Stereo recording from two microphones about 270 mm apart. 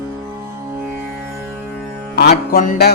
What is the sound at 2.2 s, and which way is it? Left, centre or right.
Music, left.